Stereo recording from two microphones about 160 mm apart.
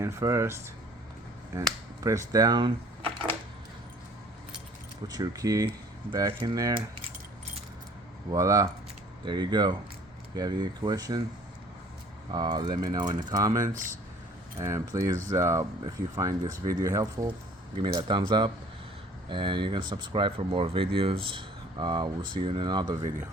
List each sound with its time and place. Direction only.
0.0 s speech: 15° right (ahead or behind)
2.0 s speech: 20° right (ahead or behind)
5.0 s speech: 25° right (ahead or behind)
8.3 s speech: 20° right (ahead or behind)
12.3 s speech: 25° right (ahead or behind)